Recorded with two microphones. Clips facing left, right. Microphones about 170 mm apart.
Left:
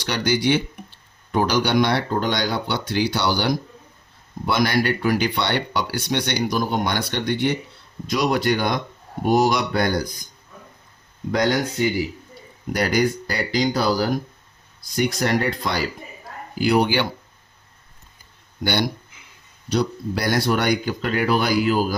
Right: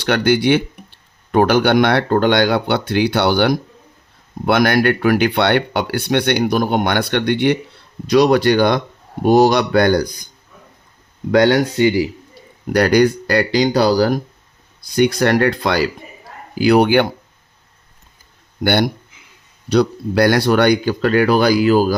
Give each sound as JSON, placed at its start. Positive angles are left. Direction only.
{"t": 0.0, "sound": "speech", "side_deg": -55}
{"t": 8.1, "sound": "speech", "side_deg": -80}
{"t": 11.3, "sound": "speech", "side_deg": -75}
{"t": 18.6, "sound": "speech", "side_deg": -55}
{"t": 19.7, "sound": "speech", "side_deg": -70}